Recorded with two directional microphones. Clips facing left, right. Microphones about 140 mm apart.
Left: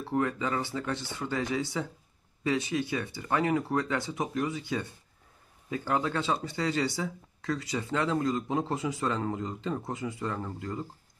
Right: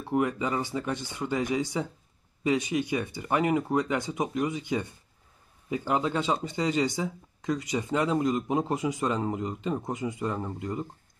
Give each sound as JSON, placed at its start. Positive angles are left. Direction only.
{"t": 0.0, "sound": "speech", "side_deg": -15}